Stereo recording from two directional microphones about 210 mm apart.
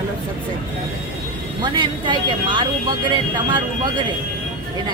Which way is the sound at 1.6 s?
20° right (ahead or behind).